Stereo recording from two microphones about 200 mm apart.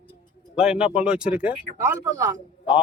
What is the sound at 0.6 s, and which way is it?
Speech, 5° right (ahead or behind).